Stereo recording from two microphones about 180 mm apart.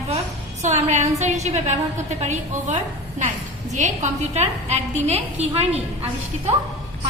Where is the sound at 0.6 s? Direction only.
40° right (ahead or behind).